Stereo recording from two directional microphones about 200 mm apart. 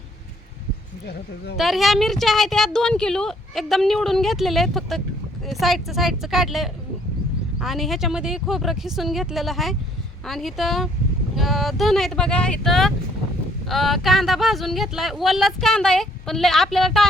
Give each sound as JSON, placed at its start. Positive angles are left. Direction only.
{"t": 1.0, "sound": "speech", "side_deg": 55}
{"t": 1.5, "sound": "a woman's voice", "side_deg": 0}